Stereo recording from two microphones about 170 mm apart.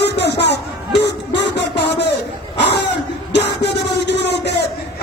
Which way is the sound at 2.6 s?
80° left.